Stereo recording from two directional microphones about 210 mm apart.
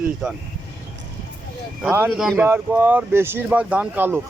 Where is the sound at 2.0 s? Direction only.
Centre (ahead or behind).